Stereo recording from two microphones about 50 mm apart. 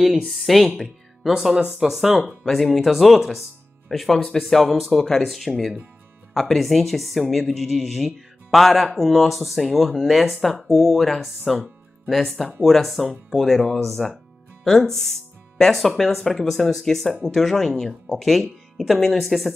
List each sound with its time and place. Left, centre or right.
0.3 s speech: centre
2.4 s speech: centre
13.7 s music: centre
14.9 s speech: centre